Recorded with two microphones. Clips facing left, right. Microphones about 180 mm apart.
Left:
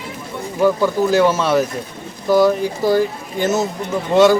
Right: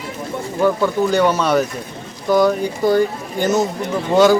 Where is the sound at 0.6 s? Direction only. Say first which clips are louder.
Left 1 dB; 5° left (ahead or behind).